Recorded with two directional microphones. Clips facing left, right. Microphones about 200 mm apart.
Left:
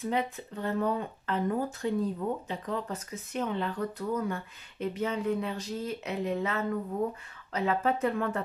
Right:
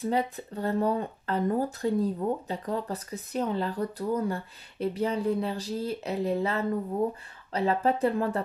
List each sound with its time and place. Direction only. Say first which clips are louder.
0.0 s speech: right 3 dB; 35° right (ahead or behind)